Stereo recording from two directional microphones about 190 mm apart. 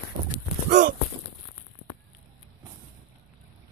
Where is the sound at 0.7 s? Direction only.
40° right (ahead or behind).